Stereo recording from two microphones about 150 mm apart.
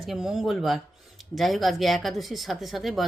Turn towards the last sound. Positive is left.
turn(degrees=0)  # may be behind; listen again after turning